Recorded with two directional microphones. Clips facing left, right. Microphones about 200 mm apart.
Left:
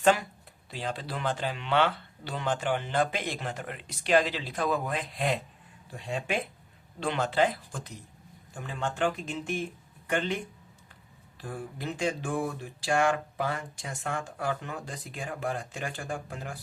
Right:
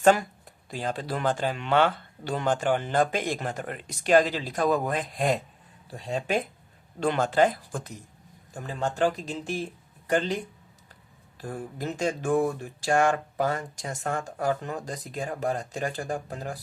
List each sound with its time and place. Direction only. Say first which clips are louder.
0.0 s speech: right 4 dB; 45° right (ahead or behind)